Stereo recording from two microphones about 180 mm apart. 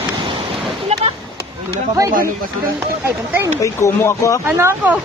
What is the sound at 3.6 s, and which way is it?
Speech, 15° left (ahead or behind).